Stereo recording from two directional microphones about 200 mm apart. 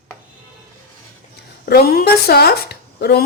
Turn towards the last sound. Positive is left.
turn(degrees=50)  # may be behind; listen again after turning